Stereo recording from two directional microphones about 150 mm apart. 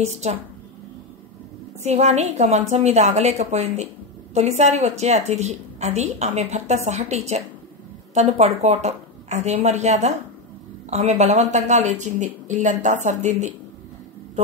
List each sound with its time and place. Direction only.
0.0 s a woman's voice: 45° right (ahead or behind)
1.8 s a woman's voice: 50° right (ahead or behind)